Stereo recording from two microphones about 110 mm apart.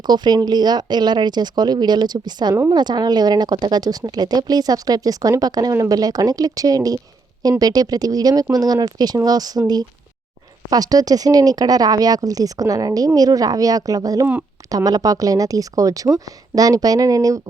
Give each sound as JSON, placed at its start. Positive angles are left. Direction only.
{"t": 0.1, "sound": "speech", "side_deg": -40}